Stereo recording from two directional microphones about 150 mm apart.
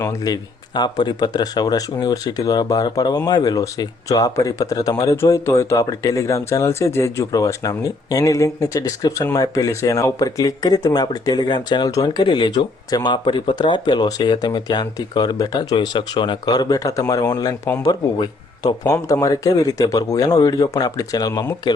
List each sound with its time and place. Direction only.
0.0 s speech: 25° left (ahead or behind)